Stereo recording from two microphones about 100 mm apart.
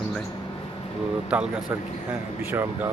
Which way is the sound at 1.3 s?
5° right (ahead or behind).